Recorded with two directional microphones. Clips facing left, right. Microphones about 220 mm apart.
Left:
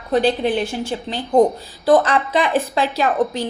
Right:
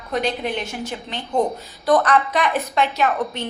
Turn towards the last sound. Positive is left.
turn(degrees=30)  # may be behind; listen again after turning